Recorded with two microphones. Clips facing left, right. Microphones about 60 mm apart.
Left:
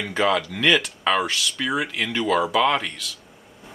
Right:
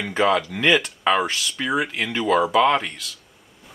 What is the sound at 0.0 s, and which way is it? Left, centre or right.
Speech, centre.